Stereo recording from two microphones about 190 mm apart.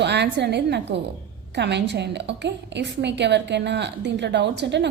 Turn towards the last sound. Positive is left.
turn(degrees=-65)  # may be behind; listen again after turning